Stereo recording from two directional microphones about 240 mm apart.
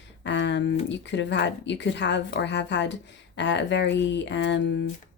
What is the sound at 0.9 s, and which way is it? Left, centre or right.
Speech, left.